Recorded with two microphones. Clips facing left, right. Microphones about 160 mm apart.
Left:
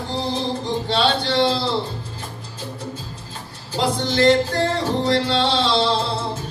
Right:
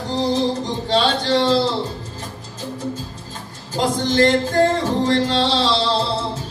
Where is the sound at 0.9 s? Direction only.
40° right (ahead or behind).